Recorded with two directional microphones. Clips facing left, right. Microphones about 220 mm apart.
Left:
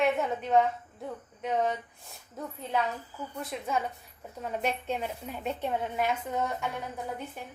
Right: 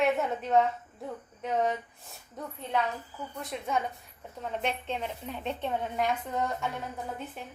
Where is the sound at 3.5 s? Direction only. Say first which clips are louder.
Right 1 dB; centre (ahead or behind).